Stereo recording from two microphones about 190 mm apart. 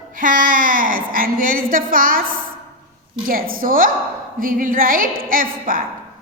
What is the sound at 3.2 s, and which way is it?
A woman's voice, 50° right (ahead or behind).